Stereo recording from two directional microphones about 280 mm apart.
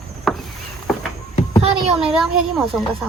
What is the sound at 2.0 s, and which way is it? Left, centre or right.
Speech, centre.